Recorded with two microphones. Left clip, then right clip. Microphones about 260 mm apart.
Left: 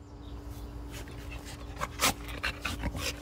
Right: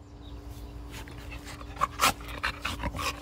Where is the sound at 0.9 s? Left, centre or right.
Centre.